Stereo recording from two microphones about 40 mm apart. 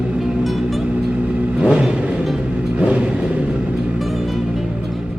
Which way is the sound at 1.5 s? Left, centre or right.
Right.